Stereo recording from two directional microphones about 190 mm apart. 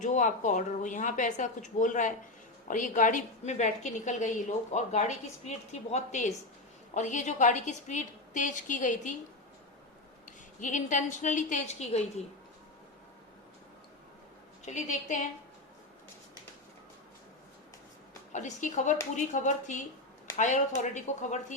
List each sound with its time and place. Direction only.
0.0 s a woman's voice: 40° left (ahead or behind)
10.2 s a woman's voice: 40° left (ahead or behind)
14.6 s a woman's voice: 40° left (ahead or behind)
18.3 s a woman's voice: 40° left (ahead or behind)